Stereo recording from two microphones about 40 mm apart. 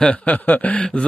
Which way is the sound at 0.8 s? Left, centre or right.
Left.